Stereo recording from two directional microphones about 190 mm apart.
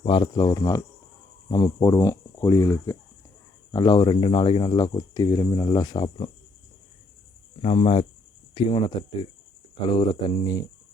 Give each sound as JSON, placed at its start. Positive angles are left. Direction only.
{"t": 0.0, "sound": "speech", "side_deg": 25}
{"t": 7.6, "sound": "speech", "side_deg": 30}